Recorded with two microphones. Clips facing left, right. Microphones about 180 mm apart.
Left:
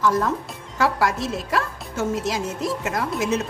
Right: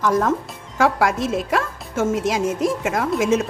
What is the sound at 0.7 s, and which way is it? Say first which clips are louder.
A woman's voice: right 3 dB; 50° right (ahead or behind).